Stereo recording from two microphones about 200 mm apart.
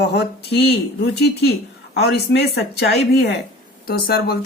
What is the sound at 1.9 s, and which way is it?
Speech, 55° left (ahead or behind).